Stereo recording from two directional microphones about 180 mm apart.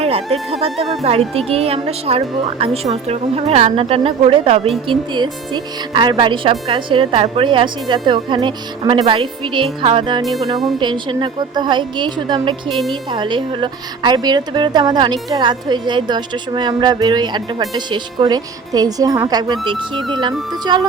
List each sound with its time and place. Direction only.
0.0 s music: 35° right (ahead or behind)
0.6 s a woman's voice: 35° right (ahead or behind)